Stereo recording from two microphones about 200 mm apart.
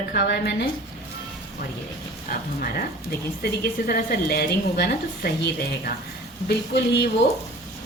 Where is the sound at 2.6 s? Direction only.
50° left (ahead or behind).